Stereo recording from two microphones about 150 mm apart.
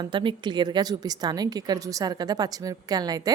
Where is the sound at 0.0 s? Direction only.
30° right (ahead or behind).